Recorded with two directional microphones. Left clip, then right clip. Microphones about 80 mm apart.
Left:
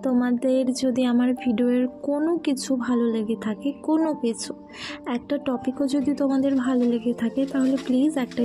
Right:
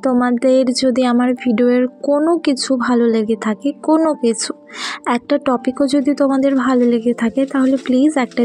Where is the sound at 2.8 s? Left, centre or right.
Right.